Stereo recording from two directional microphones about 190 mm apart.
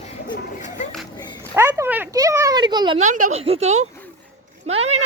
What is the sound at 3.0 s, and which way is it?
Speech, 40° right (ahead or behind).